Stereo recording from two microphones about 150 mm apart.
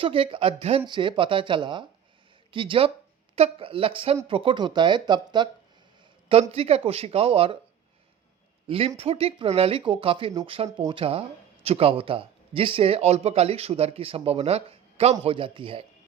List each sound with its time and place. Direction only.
0.0 s speech: 35° right (ahead or behind)
6.5 s speech: 40° right (ahead or behind)
8.6 s speech: 40° right (ahead or behind)